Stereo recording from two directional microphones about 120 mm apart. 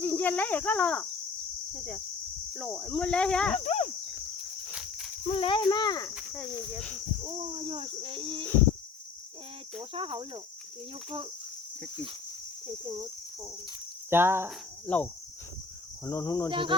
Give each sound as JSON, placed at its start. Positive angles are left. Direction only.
{"t": 0.0, "sound": "speech", "side_deg": 15}
{"t": 3.6, "sound": "insect", "side_deg": 65}
{"t": 4.7, "sound": "cricket", "side_deg": -5}
{"t": 5.3, "sound": "speech", "side_deg": 50}
{"t": 6.7, "sound": "speech", "side_deg": 10}
{"t": 7.3, "sound": "speech", "side_deg": -60}
{"t": 9.9, "sound": "speech", "side_deg": -50}
{"t": 12.6, "sound": "speech", "side_deg": -40}
{"t": 14.1, "sound": "cricket", "side_deg": -20}
{"t": 14.8, "sound": "speech", "side_deg": 10}
{"t": 16.0, "sound": "speech", "side_deg": 25}
{"t": 16.5, "sound": "speech", "side_deg": -45}